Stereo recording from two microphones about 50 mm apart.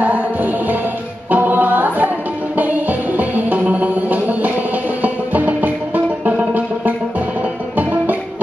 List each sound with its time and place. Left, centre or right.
0.0 s music: right